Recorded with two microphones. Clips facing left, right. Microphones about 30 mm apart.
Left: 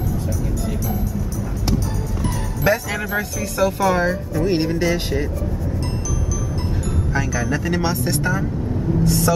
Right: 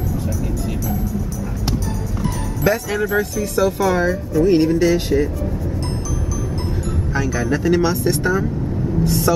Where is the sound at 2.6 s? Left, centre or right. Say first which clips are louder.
Right 1 dB; centre.